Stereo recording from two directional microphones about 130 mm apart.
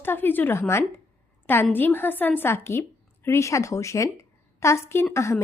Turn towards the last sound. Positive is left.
turn(degrees=20)  # may be behind; listen again after turning